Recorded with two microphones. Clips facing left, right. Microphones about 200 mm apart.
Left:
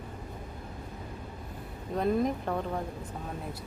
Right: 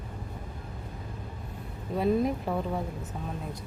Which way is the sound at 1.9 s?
5° right (ahead or behind).